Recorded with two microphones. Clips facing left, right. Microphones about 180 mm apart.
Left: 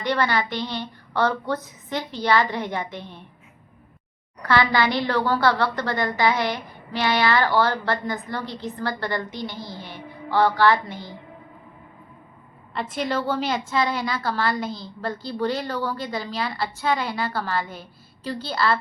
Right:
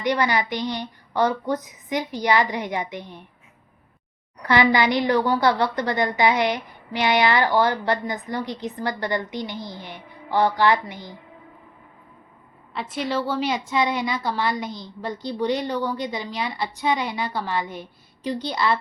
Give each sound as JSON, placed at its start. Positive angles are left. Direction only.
{"t": 0.0, "sound": "a woman's voice", "side_deg": -15}
{"t": 4.4, "sound": "a woman's voice", "side_deg": -15}
{"t": 12.7, "sound": "a woman's voice", "side_deg": -5}